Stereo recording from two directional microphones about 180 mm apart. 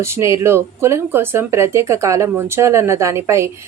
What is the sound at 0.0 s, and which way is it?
Speech, 15° right (ahead or behind).